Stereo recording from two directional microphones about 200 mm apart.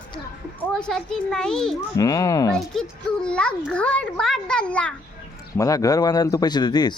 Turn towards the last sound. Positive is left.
turn(degrees=20)  # may be behind; listen again after turning